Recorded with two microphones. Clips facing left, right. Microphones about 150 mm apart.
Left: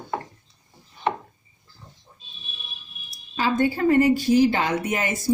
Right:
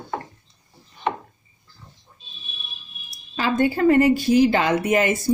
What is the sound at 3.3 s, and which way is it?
Speech, 65° right (ahead or behind).